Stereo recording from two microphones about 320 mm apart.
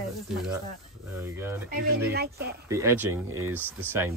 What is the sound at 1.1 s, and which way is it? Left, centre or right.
Speech, centre.